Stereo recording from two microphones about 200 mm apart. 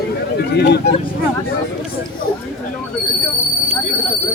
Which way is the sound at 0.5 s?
55° left (ahead or behind).